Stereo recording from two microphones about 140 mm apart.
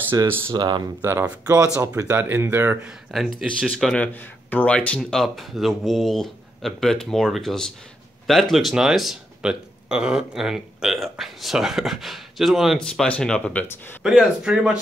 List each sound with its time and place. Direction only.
0.5 s speech: 35° right (ahead or behind)
1.0 s speech: 15° right (ahead or behind)
3.1 s speech: centre (ahead or behind)
14.0 s speech: 5° right (ahead or behind)